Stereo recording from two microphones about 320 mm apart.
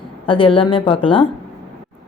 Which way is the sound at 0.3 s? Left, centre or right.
Centre.